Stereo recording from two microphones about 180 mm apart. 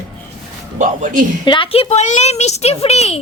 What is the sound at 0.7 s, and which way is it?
Speech, 45° right (ahead or behind).